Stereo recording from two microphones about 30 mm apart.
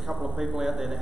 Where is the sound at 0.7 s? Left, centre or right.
Centre.